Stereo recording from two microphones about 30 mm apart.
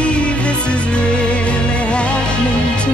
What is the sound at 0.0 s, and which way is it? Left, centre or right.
Music, left.